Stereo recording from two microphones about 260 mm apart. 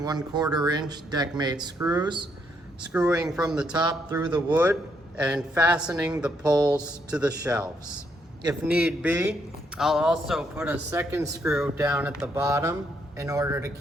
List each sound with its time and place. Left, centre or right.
0.0 s speech: centre
2.9 s speech: centre
3.7 s speech: centre
7.1 s speech: centre